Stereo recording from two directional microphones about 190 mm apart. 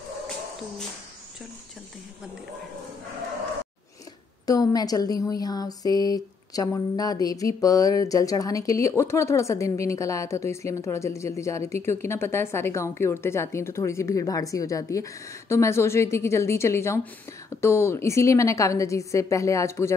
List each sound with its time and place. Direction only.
4.5 s speech: 20° left (ahead or behind)